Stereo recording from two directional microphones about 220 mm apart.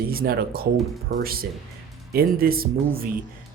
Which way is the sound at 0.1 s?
45° right (ahead or behind).